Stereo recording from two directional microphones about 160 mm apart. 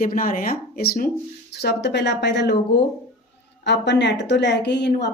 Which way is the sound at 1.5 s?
90° left.